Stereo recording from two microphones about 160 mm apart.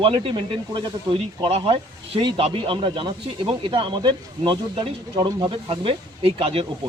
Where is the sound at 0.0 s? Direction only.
35° right (ahead or behind).